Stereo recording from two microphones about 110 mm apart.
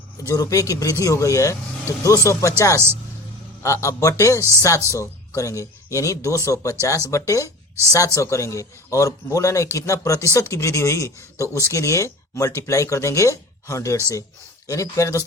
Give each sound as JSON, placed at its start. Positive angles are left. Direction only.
{"t": 0.2, "sound": "speech", "side_deg": 30}